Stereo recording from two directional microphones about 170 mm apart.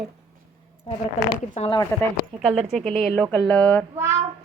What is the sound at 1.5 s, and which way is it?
Speech, 35° left (ahead or behind).